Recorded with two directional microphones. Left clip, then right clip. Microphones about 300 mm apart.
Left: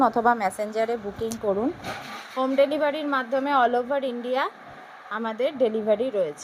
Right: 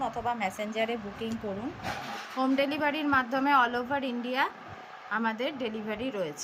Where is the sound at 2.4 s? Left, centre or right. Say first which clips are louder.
Left 7 dB; centre.